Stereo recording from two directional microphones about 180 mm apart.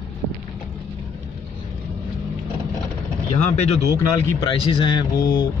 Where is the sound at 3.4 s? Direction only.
40° left (ahead or behind).